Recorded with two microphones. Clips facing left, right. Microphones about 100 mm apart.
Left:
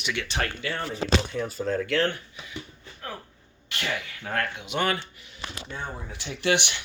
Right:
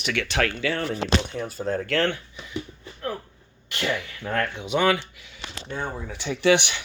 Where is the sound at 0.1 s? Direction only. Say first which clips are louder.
Right 5 dB; 80° right.